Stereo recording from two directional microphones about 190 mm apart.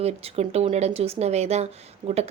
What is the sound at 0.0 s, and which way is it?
Speech, 35° right (ahead or behind).